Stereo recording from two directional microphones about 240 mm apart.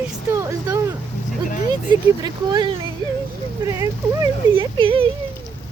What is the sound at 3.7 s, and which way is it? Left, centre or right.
Speech, centre.